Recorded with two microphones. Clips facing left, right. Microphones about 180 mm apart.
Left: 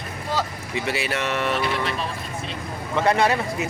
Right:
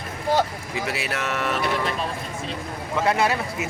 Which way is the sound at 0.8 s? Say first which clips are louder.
Left 2 dB; centre (ahead or behind).